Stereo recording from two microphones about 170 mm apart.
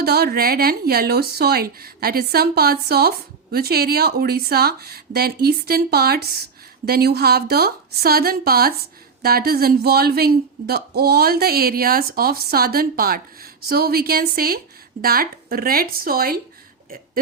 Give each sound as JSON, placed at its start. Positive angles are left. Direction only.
{"t": 0.0, "sound": "speech", "side_deg": -65}